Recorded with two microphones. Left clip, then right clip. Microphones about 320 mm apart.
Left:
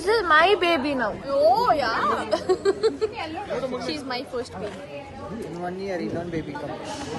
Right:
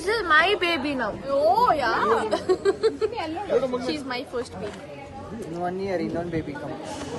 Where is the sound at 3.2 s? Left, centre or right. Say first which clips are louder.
Right 4 dB; right.